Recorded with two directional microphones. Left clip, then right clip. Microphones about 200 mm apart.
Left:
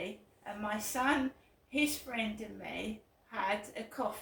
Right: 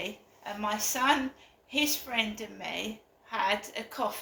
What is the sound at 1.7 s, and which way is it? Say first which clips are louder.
A woman's voice: right 5 dB; 15° left (ahead or behind).